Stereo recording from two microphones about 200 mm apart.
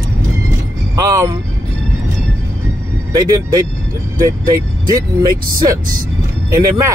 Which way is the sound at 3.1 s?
20° right (ahead or behind).